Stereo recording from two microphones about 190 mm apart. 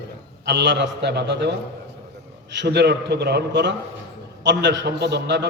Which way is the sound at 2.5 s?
65° right (ahead or behind).